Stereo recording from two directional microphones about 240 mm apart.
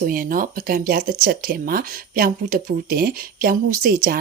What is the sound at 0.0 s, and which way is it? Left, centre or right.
Speech, right.